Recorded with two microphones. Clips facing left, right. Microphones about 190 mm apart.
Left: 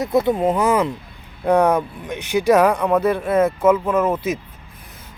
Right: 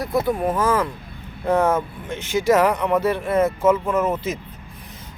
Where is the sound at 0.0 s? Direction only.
25° left (ahead or behind).